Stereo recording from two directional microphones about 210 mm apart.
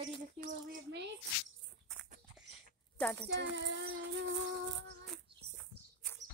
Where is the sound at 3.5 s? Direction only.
60° right (ahead or behind).